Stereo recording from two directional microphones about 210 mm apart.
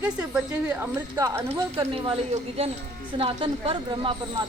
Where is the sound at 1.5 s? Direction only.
25° right (ahead or behind).